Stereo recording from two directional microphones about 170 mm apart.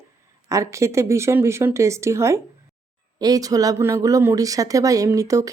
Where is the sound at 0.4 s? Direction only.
20° right (ahead or behind).